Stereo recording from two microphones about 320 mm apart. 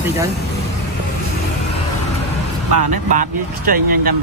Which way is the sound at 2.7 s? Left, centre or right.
Right.